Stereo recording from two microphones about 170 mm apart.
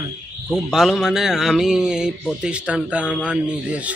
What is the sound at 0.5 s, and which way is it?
Speech, centre (ahead or behind).